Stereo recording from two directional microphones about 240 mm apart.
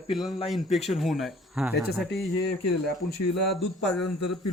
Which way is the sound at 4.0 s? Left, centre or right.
Left.